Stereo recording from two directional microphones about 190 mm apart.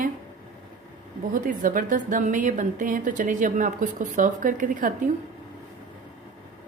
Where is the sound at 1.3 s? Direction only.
45° right (ahead or behind).